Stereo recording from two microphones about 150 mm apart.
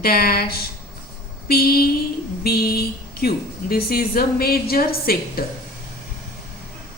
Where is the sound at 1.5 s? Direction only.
90° left.